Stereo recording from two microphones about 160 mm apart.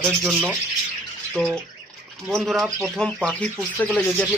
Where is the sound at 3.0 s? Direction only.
5° left (ahead or behind).